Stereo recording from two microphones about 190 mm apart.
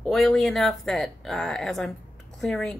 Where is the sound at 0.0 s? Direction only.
Centre (ahead or behind).